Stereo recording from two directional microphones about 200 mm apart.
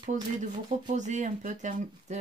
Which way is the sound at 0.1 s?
40° right (ahead or behind).